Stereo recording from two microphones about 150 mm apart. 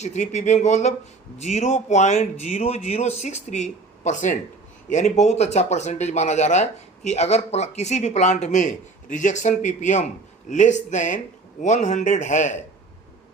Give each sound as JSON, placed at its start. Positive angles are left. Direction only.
{"t": 0.0, "sound": "speech", "side_deg": 50}